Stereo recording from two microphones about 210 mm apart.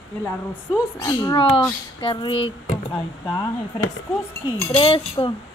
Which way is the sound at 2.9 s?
15° left (ahead or behind).